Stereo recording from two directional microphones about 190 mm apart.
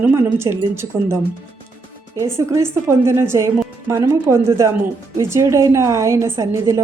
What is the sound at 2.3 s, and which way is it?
Speech, 15° right (ahead or behind).